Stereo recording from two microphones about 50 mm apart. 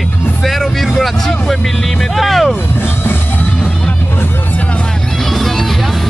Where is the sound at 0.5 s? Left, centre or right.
Centre.